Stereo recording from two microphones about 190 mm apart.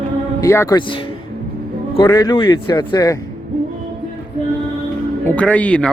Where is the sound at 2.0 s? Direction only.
20° left (ahead or behind).